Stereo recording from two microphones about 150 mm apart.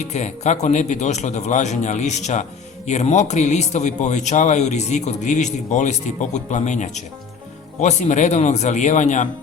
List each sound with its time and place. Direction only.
0.1 s a man's voice: 50° left (ahead or behind)